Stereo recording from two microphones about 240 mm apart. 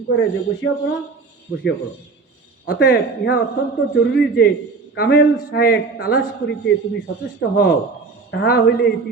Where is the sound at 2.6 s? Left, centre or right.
Left.